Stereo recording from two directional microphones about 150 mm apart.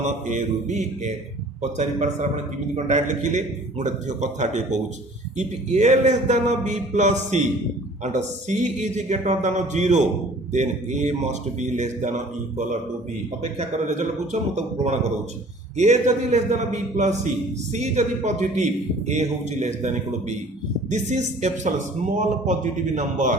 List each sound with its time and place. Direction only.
0.0 s a man's voice: 55° right (ahead or behind)